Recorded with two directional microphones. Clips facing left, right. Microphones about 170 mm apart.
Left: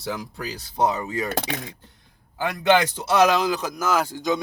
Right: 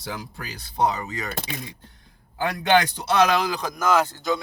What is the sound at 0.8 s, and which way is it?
Speech, 10° left (ahead or behind).